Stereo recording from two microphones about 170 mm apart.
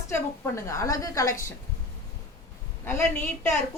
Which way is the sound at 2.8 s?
15° left (ahead or behind).